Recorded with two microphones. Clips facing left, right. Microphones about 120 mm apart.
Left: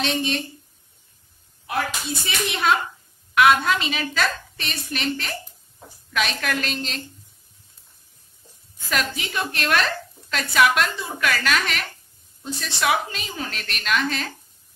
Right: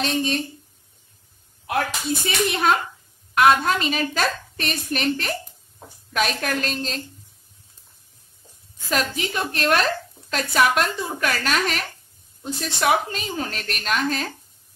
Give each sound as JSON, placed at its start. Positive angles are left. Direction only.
{"t": 0.0, "sound": "a woman's voice", "side_deg": -35}
{"t": 2.2, "sound": "a woman's voice", "side_deg": -45}
{"t": 8.9, "sound": "a woman's voice", "side_deg": -35}